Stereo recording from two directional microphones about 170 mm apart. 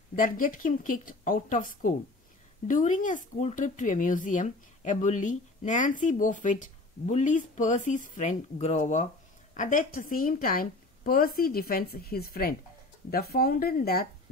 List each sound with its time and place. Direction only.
0.1 s a woman's voice: 55° left (ahead or behind)